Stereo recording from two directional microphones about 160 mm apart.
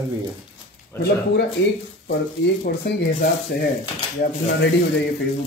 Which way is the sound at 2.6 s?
80° left.